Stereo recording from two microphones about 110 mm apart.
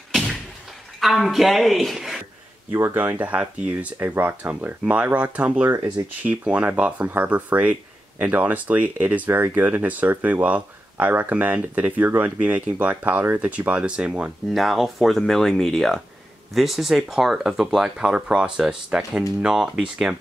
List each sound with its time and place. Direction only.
1.0 s speech: centre (ahead or behind)
2.7 s speech: 20° right (ahead or behind)